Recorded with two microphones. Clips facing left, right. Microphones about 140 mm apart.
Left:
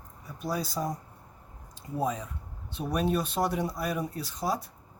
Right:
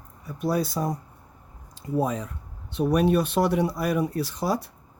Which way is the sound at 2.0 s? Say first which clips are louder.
Right 2 dB; 65° right (ahead or behind).